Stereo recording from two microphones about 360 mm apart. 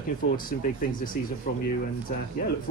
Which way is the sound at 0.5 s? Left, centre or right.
Left.